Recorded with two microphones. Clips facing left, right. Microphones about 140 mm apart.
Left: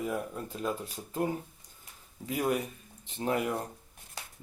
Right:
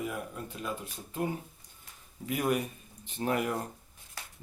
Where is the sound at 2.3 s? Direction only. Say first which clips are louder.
Even; 25° left (ahead or behind).